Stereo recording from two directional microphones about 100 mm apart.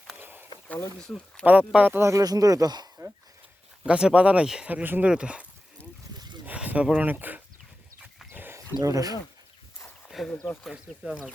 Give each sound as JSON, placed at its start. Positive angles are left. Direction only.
{"t": 0.2, "sound": "a sound", "side_deg": -20}
{"t": 0.9, "sound": "speech", "side_deg": 10}
{"t": 1.5, "sound": "speech", "side_deg": -15}
{"t": 2.0, "sound": "speech", "side_deg": -30}
{"t": 3.8, "sound": "speech", "side_deg": -10}
{"t": 8.3, "sound": "a sound", "side_deg": -20}
{"t": 8.7, "sound": "speech", "side_deg": -35}
{"t": 10.2, "sound": "speech", "side_deg": 15}
{"t": 10.6, "sound": "speech", "side_deg": -5}